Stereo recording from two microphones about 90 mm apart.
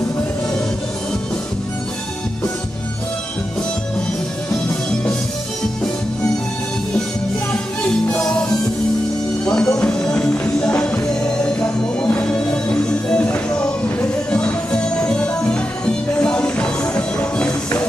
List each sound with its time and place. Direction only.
8.1 s music: 10° left (ahead or behind)